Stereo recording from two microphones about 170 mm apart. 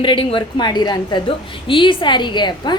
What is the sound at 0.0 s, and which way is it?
A woman's voice, 30° left (ahead or behind).